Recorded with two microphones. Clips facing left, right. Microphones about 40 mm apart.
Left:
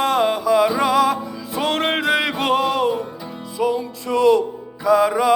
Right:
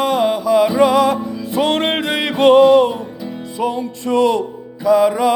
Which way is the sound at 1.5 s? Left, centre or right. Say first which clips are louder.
Right 5 dB; right.